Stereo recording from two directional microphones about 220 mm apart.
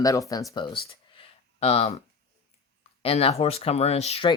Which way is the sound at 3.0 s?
30° left (ahead or behind).